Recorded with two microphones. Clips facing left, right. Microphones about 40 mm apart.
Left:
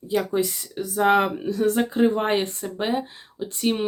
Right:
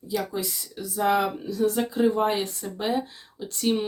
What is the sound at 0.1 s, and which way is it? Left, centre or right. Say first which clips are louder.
Speech: left 6 dB; left.